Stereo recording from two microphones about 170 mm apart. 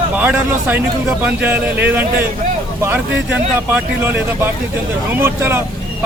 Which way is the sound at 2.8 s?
10° right (ahead or behind).